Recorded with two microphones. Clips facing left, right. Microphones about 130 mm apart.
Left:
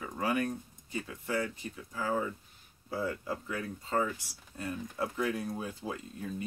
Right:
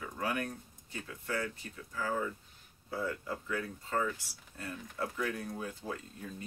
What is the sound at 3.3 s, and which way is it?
Speech, 25° left (ahead or behind).